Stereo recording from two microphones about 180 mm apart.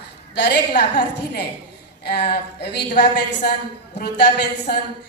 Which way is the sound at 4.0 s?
65° left (ahead or behind).